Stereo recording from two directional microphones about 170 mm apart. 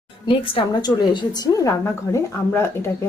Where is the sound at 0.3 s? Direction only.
30° left (ahead or behind).